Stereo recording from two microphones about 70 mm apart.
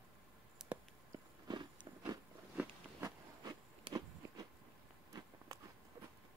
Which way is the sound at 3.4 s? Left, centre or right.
Right.